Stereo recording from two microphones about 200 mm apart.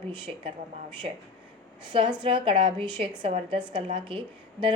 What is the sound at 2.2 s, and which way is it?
A woman's voice, 25° right (ahead or behind).